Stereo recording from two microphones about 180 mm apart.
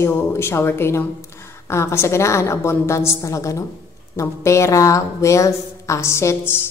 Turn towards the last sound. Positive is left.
turn(degrees=15)  # may be behind; listen again after turning